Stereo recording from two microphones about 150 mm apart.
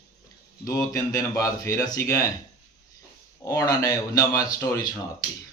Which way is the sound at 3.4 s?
20° left (ahead or behind).